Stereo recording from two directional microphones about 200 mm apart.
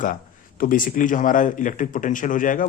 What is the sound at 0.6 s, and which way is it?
A man's voice, 45° left (ahead or behind).